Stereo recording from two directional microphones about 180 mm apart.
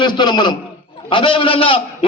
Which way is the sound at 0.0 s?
25° left (ahead or behind).